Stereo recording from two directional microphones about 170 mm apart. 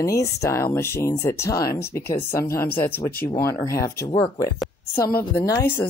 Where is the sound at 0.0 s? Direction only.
20° left (ahead or behind).